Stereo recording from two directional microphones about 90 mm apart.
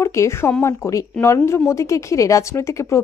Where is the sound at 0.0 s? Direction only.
30° left (ahead or behind).